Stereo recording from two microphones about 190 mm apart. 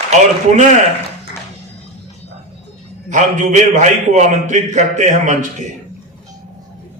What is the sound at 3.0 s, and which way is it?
A man's voice, 40° right (ahead or behind).